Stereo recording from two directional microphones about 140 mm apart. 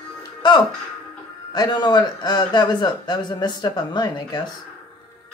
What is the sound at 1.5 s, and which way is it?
Speech, 30° left (ahead or behind).